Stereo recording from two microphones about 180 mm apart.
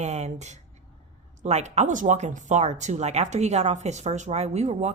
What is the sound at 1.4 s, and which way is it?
Speech, 40° right (ahead or behind).